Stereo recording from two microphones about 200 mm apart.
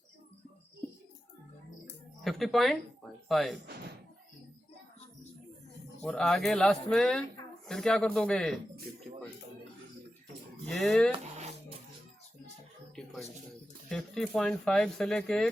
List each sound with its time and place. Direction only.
2.2 s speech: centre (ahead or behind)
6.0 s speech: 5° left (ahead or behind)
10.7 s speech: centre (ahead or behind)
11.1 s music: 35° right (ahead or behind)
13.0 s a sound: centre (ahead or behind)
13.9 s speech: centre (ahead or behind)